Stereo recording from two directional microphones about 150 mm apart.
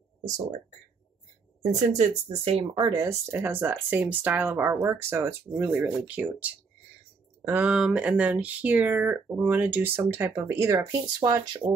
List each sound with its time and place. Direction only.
1.8 s speech: 45° right (ahead or behind)
2.8 s speech: 30° right (ahead or behind)
3.1 s speech: 15° right (ahead or behind)